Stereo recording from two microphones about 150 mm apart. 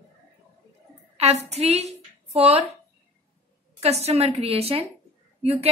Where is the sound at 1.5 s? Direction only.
45° right (ahead or behind).